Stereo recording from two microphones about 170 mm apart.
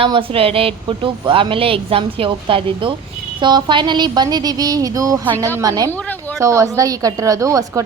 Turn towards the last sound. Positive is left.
turn(degrees=-20)  # may be behind; listen again after turning